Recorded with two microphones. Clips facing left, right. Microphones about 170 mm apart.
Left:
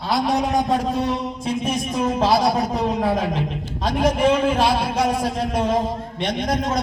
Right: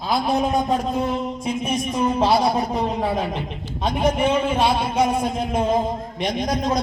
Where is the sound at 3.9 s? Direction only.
90° left.